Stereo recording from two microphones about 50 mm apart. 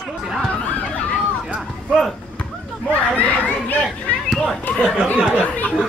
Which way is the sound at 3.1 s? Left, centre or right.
Left.